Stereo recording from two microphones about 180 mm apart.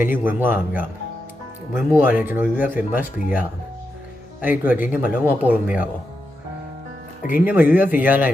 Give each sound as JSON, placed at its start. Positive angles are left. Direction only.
{"t": 0.1, "sound": "speech", "side_deg": -10}
{"t": 1.7, "sound": "speech", "side_deg": -10}
{"t": 7.2, "sound": "speech", "side_deg": 50}
{"t": 7.4, "sound": "speech", "side_deg": -10}